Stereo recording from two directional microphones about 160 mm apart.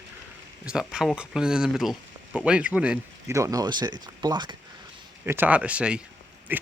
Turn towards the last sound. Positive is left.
turn(degrees=-10)  # may be behind; listen again after turning